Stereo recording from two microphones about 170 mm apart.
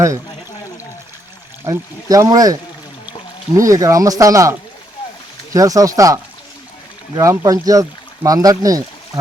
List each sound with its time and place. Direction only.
1.6 s speech: 20° right (ahead or behind)
3.6 s speech: 20° right (ahead or behind)
5.5 s speech: 20° right (ahead or behind)
7.2 s speech: 20° right (ahead or behind)